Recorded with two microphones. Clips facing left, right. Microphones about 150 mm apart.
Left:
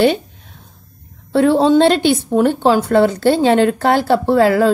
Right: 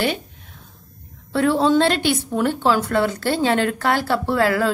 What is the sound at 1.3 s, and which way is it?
A woman's voice, 25° left (ahead or behind).